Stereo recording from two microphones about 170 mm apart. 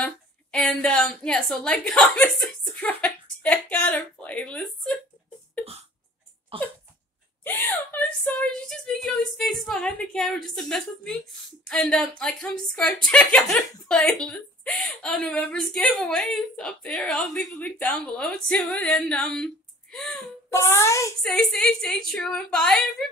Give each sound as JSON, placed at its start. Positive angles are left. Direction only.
{"t": 0.0, "sound": "a woman's voice", "side_deg": 5}
{"t": 6.5, "sound": "cough", "side_deg": -30}
{"t": 7.4, "sound": "a woman's voice", "side_deg": 10}
{"t": 20.4, "sound": "speech", "side_deg": 15}
{"t": 21.2, "sound": "a woman's voice", "side_deg": 5}